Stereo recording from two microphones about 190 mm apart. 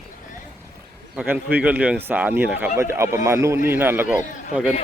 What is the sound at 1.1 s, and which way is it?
A man's voice, 10° right (ahead or behind).